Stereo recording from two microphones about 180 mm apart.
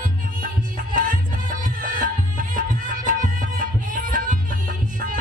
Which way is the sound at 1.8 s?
50° right (ahead or behind).